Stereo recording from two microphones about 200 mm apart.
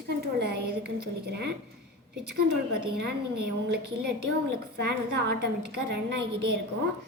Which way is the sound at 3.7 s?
55° right (ahead or behind).